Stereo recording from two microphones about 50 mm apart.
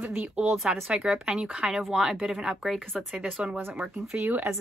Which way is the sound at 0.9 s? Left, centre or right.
Centre.